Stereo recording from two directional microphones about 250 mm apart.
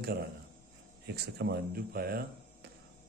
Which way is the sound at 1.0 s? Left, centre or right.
Right.